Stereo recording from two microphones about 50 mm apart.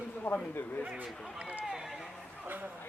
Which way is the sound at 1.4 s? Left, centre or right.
Right.